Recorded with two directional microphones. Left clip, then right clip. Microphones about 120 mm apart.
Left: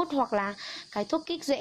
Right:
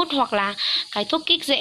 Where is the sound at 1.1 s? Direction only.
30° left (ahead or behind).